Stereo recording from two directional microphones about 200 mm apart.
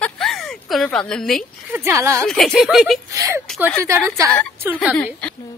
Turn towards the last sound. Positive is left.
turn(degrees=5)  # may be behind; listen again after turning